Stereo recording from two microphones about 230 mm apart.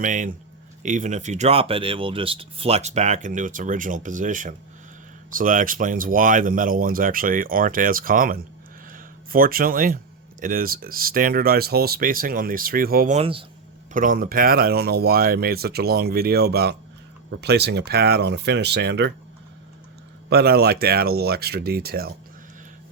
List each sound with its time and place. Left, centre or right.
0.0 s speech: right
20.3 s speech: right